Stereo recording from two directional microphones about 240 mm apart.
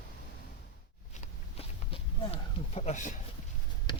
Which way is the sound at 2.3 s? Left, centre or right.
Left.